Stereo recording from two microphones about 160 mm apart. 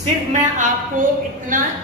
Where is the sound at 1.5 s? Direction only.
55° right (ahead or behind).